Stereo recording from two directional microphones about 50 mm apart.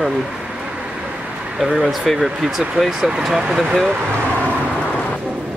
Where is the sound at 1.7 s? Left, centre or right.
Centre.